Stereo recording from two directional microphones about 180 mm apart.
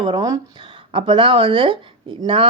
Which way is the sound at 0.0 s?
20° right (ahead or behind).